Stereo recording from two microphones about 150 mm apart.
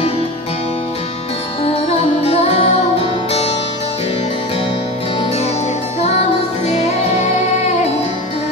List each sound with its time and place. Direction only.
2.2 s music: 40° left (ahead or behind)
5.2 s music: 45° left (ahead or behind)
6.6 s music: 45° left (ahead or behind)